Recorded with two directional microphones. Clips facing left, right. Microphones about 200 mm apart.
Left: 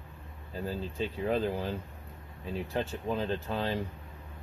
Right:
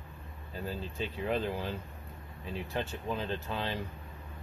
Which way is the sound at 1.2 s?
40° left (ahead or behind).